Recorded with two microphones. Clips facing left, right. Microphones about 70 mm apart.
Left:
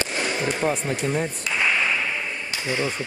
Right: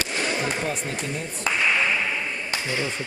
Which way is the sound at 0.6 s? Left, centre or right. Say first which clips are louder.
Left 5 dB; left.